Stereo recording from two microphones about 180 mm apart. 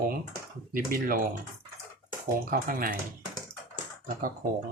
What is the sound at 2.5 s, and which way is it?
Speech, 50° right (ahead or behind).